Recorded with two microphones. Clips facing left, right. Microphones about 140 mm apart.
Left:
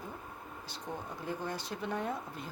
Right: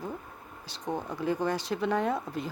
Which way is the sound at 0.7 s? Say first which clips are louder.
Right 8 dB; 90° right.